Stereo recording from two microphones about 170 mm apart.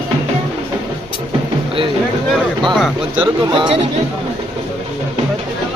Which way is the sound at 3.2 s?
25° right (ahead or behind).